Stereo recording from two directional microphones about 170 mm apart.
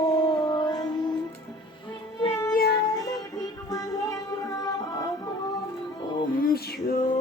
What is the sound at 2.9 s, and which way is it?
Music, 20° left (ahead or behind).